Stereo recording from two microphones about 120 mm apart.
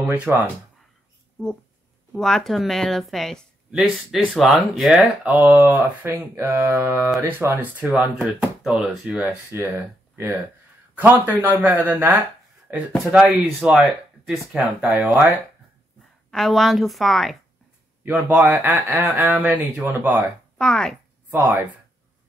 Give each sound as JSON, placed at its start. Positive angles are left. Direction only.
{"t": 0.0, "sound": "speech", "side_deg": -15}
{"t": 2.1, "sound": "speech", "side_deg": 5}
{"t": 9.5, "sound": "a sound", "side_deg": -20}
{"t": 10.1, "sound": "speech", "side_deg": -20}
{"t": 13.1, "sound": "speech", "side_deg": -5}
{"t": 16.3, "sound": "speech", "side_deg": 0}
{"t": 18.0, "sound": "speech", "side_deg": -15}
{"t": 18.8, "sound": "a sound", "side_deg": -25}
{"t": 19.0, "sound": "speech", "side_deg": -15}
{"t": 20.5, "sound": "speech", "side_deg": 5}
{"t": 21.3, "sound": "speech", "side_deg": -20}